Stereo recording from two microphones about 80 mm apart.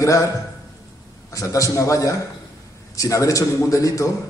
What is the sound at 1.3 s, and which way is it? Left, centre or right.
A man's voice, left.